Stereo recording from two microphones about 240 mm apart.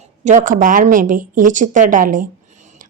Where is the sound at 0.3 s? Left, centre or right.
Right.